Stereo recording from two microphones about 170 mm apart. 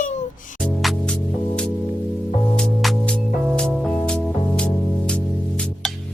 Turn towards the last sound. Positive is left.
turn(degrees=5)  # may be behind; listen again after turning